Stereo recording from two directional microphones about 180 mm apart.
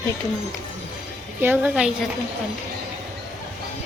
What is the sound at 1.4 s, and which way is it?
Speech, 10° right (ahead or behind).